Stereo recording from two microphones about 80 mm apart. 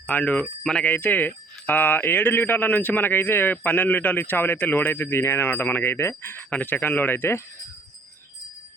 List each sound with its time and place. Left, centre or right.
0.1 s speech: centre
0.6 s speech: centre
0.9 s speech: centre